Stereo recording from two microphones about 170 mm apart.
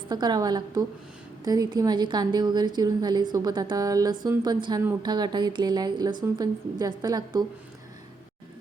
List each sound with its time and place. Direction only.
0.1 s a woman's voice: 25° right (ahead or behind)